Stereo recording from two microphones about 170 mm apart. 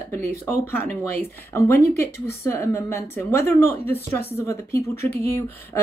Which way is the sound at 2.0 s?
15° left (ahead or behind).